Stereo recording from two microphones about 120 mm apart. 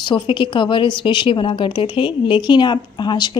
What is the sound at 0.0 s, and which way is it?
A woman's voice, 40° left (ahead or behind).